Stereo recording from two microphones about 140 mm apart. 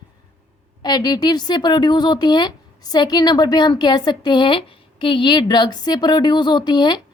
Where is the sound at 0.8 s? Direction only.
30° left (ahead or behind).